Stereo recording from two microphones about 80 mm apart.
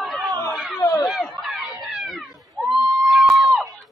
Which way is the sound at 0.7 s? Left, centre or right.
Left.